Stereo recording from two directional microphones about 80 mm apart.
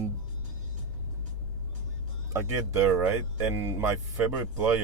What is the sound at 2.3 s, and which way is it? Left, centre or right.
Speech, right.